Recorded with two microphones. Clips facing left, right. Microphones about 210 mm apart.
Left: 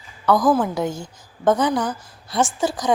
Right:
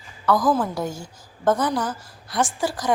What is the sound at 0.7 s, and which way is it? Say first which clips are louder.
A woman's voice: left 4 dB; 20° left (ahead or behind).